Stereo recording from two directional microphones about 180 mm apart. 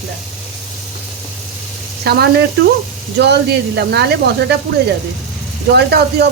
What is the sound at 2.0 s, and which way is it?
Speech, 65° right (ahead or behind).